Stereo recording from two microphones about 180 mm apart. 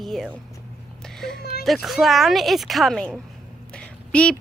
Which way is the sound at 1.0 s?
Centre (ahead or behind).